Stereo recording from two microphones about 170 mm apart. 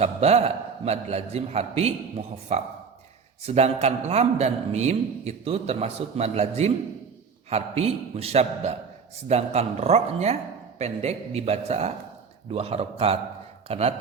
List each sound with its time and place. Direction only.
0.0 s a man's voice: 40° right (ahead or behind)